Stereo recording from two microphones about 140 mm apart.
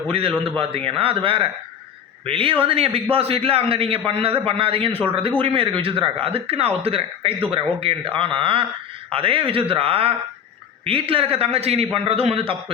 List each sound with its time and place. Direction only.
0.1 s a man's voice: 40° right (ahead or behind)